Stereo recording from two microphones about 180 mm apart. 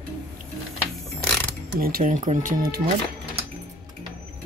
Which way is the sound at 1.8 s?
55° right (ahead or behind).